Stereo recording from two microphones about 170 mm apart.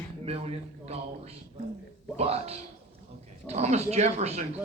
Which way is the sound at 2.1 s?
40° right (ahead or behind).